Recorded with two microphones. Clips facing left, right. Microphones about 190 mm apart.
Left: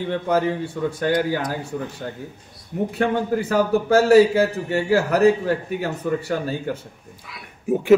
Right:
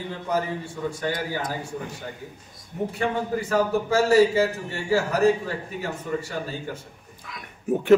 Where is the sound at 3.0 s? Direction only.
65° left (ahead or behind).